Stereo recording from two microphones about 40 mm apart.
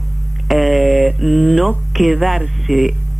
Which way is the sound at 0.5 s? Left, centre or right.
Centre.